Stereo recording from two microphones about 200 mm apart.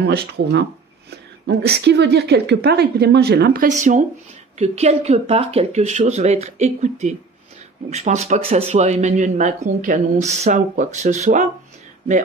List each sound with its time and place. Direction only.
0.0 s a woman's voice: 55° right (ahead or behind); by 11.4 s 40° right (ahead or behind)